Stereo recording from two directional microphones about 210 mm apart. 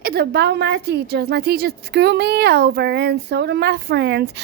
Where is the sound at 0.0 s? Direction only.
50° right (ahead or behind).